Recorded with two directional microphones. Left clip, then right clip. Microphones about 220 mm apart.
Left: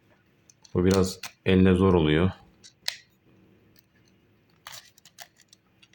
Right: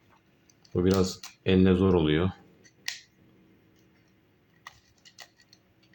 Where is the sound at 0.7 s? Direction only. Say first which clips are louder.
Left 2 dB; 15° left (ahead or behind).